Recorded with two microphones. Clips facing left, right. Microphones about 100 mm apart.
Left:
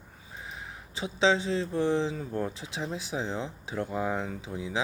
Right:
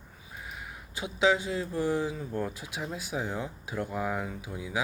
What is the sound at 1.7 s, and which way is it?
Speech, 25° left (ahead or behind).